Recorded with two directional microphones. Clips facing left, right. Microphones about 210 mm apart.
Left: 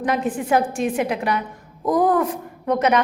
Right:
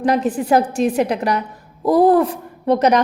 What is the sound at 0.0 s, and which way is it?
A woman's voice, 35° right (ahead or behind).